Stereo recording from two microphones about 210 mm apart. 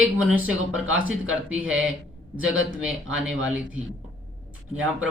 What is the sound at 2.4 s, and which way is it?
Speech, 70° right (ahead or behind).